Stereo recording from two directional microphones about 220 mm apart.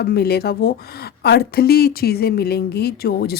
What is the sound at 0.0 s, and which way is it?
Speech, 45° left (ahead or behind).